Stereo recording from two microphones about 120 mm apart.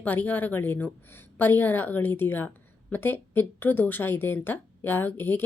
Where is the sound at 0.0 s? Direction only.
15° left (ahead or behind).